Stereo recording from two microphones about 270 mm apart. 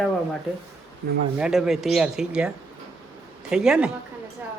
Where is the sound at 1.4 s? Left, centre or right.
Centre.